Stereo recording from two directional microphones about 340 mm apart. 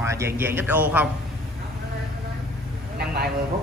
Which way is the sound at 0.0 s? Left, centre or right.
Centre.